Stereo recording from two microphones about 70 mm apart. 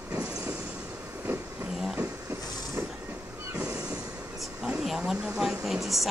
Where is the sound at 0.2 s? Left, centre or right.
Right.